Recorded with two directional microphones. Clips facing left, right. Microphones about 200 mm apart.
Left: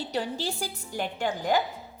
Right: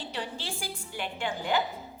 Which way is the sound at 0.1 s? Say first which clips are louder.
Left 6 dB; 40° left (ahead or behind).